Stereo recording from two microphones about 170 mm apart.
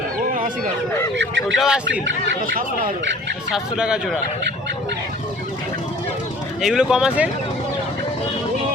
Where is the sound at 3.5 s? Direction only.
5° right (ahead or behind).